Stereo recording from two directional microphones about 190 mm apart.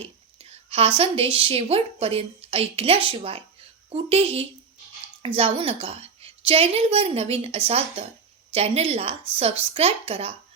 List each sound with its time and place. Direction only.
0.0 s a woman's voice: 30° right (ahead or behind)